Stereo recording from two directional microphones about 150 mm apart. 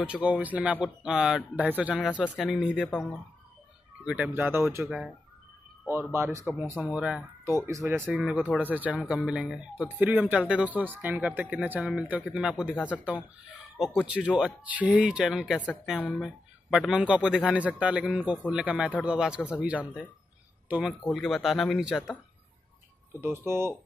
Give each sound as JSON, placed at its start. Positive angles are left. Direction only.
{"t": 0.0, "sound": "speech", "side_deg": -10}
{"t": 4.0, "sound": "speech", "side_deg": -10}
{"t": 6.1, "sound": "speech", "side_deg": -15}
{"t": 7.5, "sound": "speech", "side_deg": -20}
{"t": 8.1, "sound": "speech", "side_deg": -5}
{"t": 21.0, "sound": "speech", "side_deg": 0}
{"t": 23.2, "sound": "speech", "side_deg": -15}